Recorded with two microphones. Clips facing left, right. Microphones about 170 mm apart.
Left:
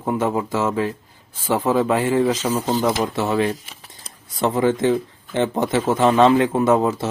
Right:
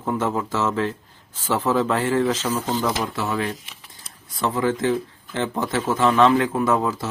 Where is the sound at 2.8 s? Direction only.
25° left (ahead or behind).